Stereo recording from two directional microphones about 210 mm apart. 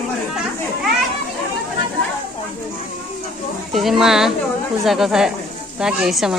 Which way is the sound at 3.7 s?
Centre (ahead or behind).